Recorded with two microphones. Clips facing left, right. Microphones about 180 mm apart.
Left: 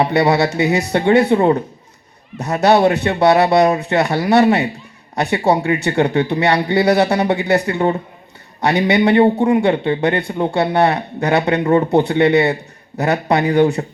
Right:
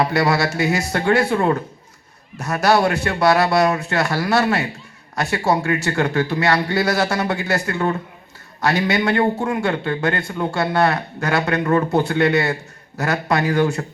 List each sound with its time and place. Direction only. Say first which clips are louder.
0.0 s a man's voice: left 4 dB; 20° left (ahead or behind)